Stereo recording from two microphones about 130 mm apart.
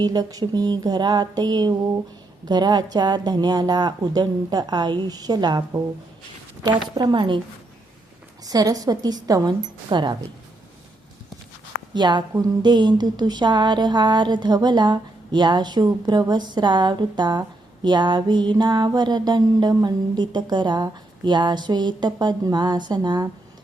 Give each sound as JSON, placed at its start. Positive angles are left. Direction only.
{"t": 0.0, "sound": "a woman's voice", "side_deg": -30}
{"t": 8.4, "sound": "a woman's voice", "side_deg": -30}
{"t": 11.9, "sound": "a woman's voice", "side_deg": -35}